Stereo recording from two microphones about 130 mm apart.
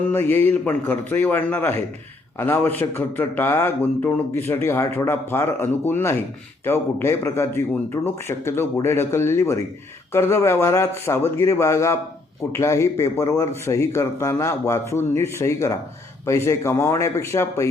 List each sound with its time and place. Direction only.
0.1 s a man's voice: 15° left (ahead or behind)